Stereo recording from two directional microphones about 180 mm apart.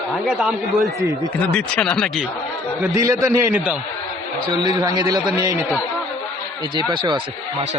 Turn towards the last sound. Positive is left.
turn(degrees=-25)  # may be behind; listen again after turning